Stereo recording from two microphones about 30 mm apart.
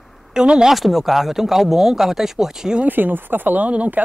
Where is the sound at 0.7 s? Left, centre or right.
Centre.